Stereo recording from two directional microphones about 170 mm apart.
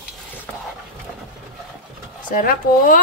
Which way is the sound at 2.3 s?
55° left (ahead or behind).